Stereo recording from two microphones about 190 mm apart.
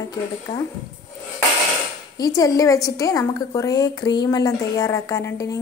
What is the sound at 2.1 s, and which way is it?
A woman's voice, 20° left (ahead or behind).